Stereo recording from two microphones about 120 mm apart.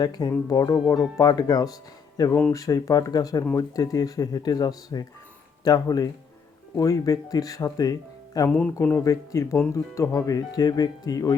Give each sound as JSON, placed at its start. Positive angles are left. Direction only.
{"t": 0.0, "sound": "speech", "side_deg": 30}
{"t": 8.4, "sound": "speech", "side_deg": 10}
{"t": 9.0, "sound": "speech", "side_deg": 30}